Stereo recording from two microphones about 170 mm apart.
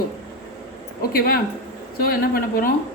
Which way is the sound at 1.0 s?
60° left (ahead or behind).